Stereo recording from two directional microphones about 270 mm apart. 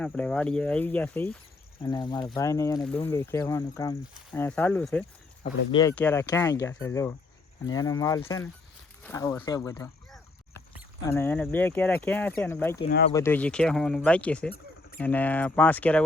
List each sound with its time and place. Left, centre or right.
0.0 s speech: centre
1.8 s speech: centre
4.0 s speech: centre
5.4 s speech: centre
5.9 s speech: centre
11.0 s speech: centre